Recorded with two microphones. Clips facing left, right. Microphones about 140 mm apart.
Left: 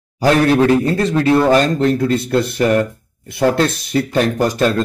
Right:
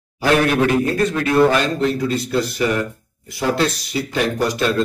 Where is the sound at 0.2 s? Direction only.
30° left (ahead or behind).